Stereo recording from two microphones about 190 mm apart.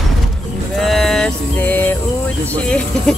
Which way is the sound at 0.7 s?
Centre (ahead or behind).